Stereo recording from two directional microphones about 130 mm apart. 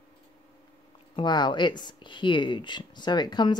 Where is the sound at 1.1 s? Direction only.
35° left (ahead or behind).